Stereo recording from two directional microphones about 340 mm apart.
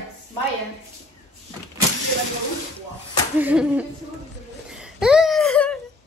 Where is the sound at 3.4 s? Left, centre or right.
Centre.